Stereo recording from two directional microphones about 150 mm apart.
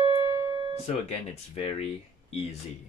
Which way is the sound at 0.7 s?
45° left (ahead or behind).